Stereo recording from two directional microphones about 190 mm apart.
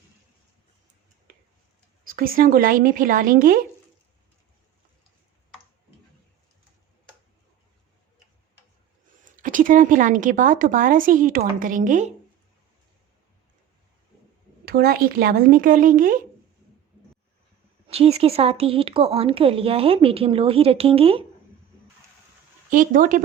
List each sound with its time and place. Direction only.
1.3 s a sound: 45° right (ahead or behind)
2.0 s speech: 50° right (ahead or behind)
9.2 s speech: 45° right (ahead or behind)
14.6 s speech: 55° right (ahead or behind)
17.8 s a woman's voice: 30° right (ahead or behind)
22.7 s speech: 45° right (ahead or behind)